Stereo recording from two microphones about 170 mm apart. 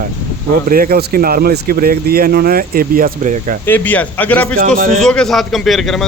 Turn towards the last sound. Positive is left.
turn(degrees=0)  # may be behind; listen again after turning